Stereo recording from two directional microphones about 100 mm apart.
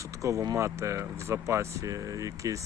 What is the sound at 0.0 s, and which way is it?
Speech, 30° right (ahead or behind).